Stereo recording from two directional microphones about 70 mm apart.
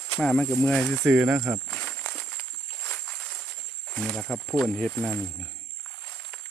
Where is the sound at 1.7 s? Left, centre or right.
Centre.